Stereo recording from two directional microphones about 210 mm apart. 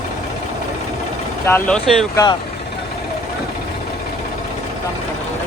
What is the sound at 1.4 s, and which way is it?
Speech, 5° left (ahead or behind).